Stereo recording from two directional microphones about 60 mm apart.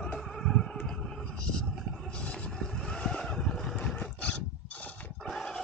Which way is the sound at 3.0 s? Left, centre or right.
Centre.